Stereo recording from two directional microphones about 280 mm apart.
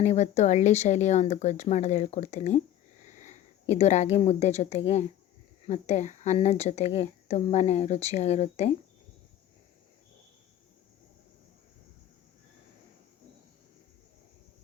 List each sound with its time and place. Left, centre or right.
0.0 s speech: left